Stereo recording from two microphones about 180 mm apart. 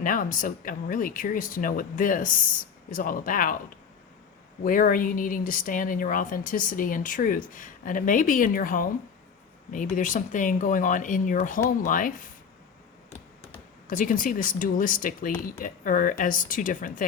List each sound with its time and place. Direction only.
0.0 s speech: 50° left (ahead or behind)
4.6 s speech: 50° left (ahead or behind)
13.8 s speech: 50° left (ahead or behind)